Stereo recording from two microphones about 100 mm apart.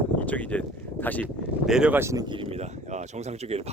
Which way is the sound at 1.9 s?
25° right (ahead or behind).